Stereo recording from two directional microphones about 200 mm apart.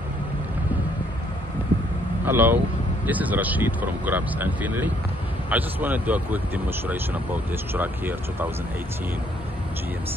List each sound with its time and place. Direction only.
2.2 s speech: 10° right (ahead or behind)